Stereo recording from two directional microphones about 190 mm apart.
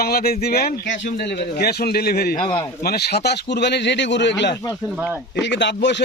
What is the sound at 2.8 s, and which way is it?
Speech, 55° left (ahead or behind).